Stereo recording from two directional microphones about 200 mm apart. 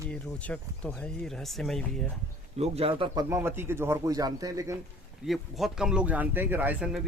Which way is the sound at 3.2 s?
10° right (ahead or behind).